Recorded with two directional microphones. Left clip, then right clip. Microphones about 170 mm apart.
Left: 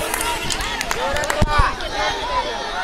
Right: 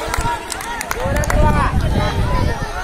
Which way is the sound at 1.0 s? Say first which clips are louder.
Right 4 dB; 40° right (ahead or behind).